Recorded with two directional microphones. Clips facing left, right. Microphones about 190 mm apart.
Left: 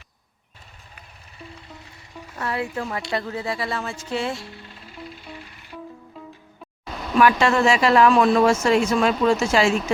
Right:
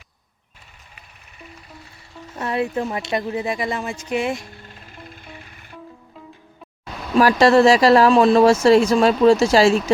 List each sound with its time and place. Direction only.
2.3 s speech: 20° right (ahead or behind)
4.7 s music: 50° right (ahead or behind)
7.2 s speech: 35° right (ahead or behind)